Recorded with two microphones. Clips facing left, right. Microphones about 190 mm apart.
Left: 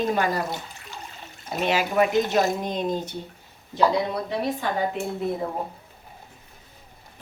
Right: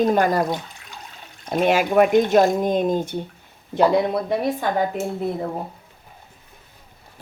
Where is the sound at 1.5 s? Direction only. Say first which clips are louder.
Right 6 dB; 50° right (ahead or behind).